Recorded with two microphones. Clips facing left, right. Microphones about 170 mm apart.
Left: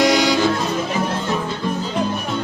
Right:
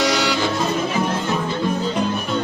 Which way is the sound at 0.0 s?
15° left (ahead or behind).